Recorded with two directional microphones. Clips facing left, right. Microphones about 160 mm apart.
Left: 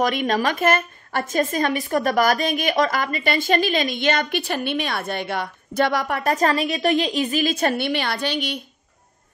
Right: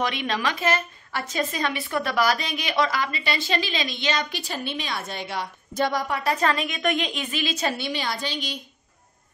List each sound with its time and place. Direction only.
0.0 s speech: 45° left (ahead or behind); by 8.5 s 65° left (ahead or behind)